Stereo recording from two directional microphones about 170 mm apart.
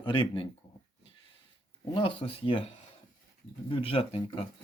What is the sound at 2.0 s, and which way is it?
Speech, 30° left (ahead or behind).